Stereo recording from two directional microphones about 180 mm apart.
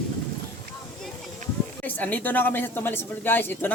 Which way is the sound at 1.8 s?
10° left (ahead or behind).